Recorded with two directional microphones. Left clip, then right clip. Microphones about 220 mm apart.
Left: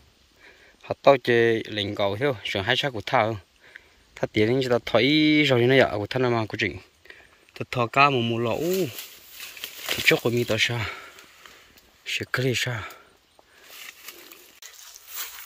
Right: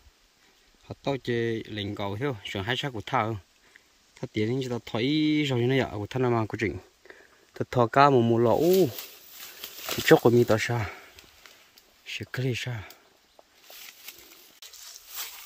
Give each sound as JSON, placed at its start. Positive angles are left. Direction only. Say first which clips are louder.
{"t": 0.8, "sound": "speech", "louder": "left 13 dB", "side_deg": -5}
{"t": 10.0, "sound": "speech", "louder": "right 3 dB", "side_deg": -35}
{"t": 15.1, "sound": "a sound", "louder": "left 3 dB", "side_deg": 0}